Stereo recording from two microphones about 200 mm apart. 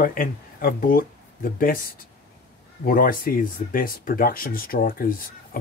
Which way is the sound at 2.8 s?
45° left (ahead or behind).